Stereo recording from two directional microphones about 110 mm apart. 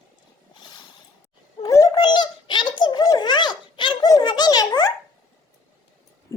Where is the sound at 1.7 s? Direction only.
30° left (ahead or behind).